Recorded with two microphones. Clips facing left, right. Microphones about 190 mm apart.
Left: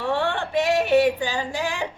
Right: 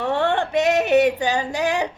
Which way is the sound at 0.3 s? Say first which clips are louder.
Right 4 dB; 20° right (ahead or behind).